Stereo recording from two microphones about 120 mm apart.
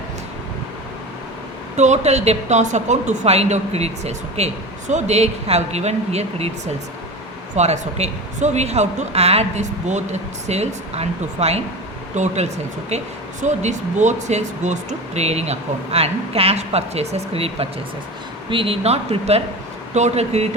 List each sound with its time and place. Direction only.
1.7 s a woman's voice: 75° right (ahead or behind)
7.5 s a woman's voice: 70° right (ahead or behind)
12.1 s a woman's voice: 75° right (ahead or behind)